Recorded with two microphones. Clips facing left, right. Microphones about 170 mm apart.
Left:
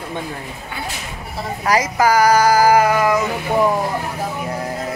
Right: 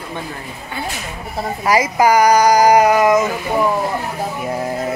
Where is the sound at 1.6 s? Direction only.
10° right (ahead or behind).